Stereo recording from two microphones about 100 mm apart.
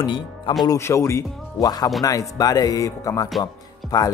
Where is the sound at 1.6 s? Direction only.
40° left (ahead or behind).